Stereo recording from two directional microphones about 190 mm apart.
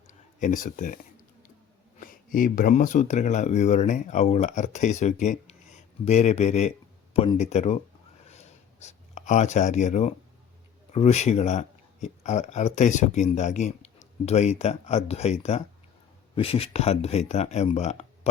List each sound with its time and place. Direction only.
0.1 s speech: 40° left (ahead or behind)
2.0 s speech: 45° left (ahead or behind)
8.3 s writing: 35° left (ahead or behind)
10.9 s speech: 35° left (ahead or behind)